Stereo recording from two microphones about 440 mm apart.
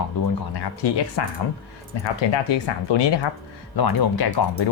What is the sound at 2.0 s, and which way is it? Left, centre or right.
Speech, left.